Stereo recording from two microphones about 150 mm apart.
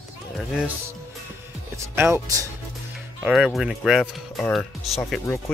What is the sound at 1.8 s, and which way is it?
Speech, 20° right (ahead or behind).